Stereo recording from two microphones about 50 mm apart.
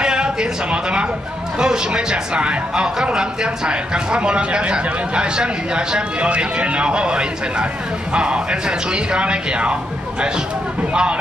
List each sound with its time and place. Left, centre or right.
0.0 s speech: centre
10.9 s speech: centre